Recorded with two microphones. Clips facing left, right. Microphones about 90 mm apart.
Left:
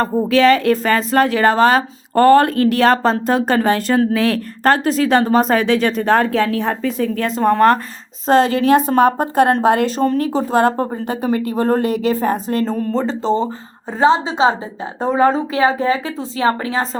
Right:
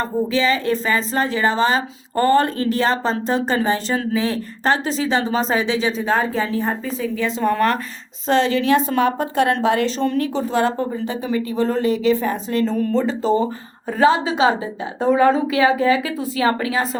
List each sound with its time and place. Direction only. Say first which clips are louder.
0.3 s a woman's voice: left 9 dB; 65° left (ahead or behind)
4.1 s a woman's voice: left 4 dB; 70° left (ahead or behind)
7.3 s a woman's voice: left 6 dB; 45° left (ahead or behind)